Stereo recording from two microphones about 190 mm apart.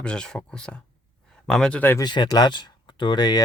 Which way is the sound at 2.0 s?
20° left (ahead or behind).